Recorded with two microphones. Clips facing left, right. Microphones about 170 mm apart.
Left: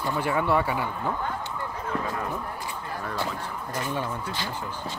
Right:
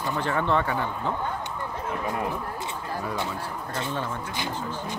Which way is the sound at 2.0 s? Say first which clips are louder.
Right 3 dB; 20° right (ahead or behind).